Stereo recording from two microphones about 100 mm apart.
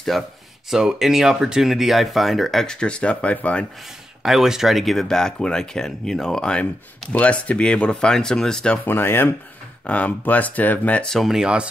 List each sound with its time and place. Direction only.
0.1 s speech: centre (ahead or behind)
4.2 s speech: 5° right (ahead or behind)
8.8 s speech: 20° left (ahead or behind); by 11.6 s 5° right (ahead or behind)